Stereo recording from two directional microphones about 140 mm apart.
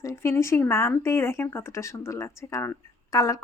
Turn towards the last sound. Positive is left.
turn(degrees=25)  # may be behind; listen again after turning